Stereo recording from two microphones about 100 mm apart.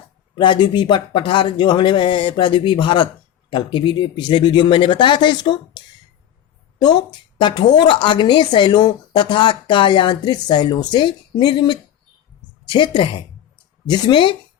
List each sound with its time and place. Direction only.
0.3 s a woman's voice: 50° left (ahead or behind)